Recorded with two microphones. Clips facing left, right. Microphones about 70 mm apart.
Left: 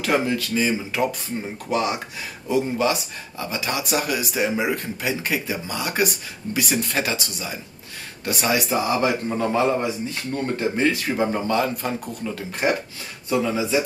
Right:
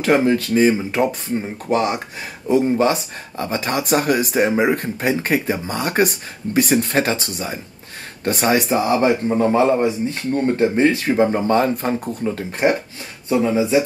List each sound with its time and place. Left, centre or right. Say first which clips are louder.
0.0 s speech: right 6 dB; right
9.4 s a man's voice: right 5 dB; right
9.8 s speech: right 6 dB; right